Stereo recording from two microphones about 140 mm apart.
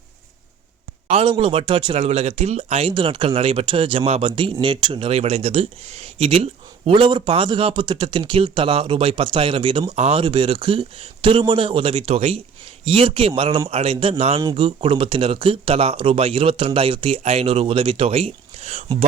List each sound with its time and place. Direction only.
1.1 s speech: 40° right (ahead or behind)
14.4 s speech: 35° right (ahead or behind)